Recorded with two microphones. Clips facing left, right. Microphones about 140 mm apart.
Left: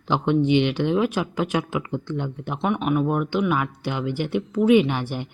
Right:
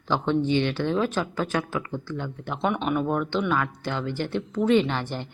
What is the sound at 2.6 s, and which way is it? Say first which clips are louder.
Speech: left 3 dB; centre (ahead or behind).